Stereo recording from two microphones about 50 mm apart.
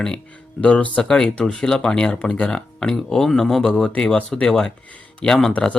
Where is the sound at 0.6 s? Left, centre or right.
Left.